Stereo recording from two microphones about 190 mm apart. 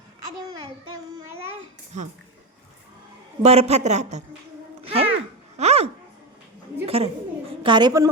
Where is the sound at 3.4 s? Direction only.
35° right (ahead or behind).